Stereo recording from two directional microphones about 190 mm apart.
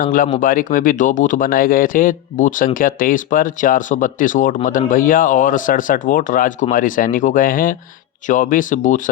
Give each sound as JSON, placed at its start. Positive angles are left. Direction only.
{"t": 0.0, "sound": "speech", "side_deg": 45}